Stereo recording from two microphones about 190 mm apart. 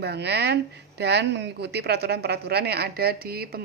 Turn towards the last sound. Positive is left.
turn(degrees=-55)  # may be behind; listen again after turning